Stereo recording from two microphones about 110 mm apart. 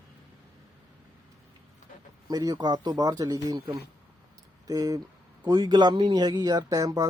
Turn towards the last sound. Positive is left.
turn(degrees=-30)  # may be behind; listen again after turning